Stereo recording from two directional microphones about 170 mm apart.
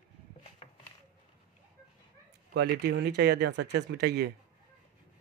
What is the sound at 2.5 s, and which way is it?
Speech, 70° right (ahead or behind).